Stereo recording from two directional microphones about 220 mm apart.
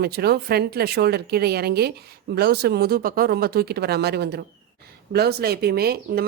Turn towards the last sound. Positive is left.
turn(degrees=-45)  # may be behind; listen again after turning